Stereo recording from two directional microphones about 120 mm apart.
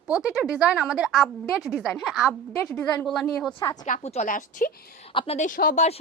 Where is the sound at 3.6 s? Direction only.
35° left (ahead or behind).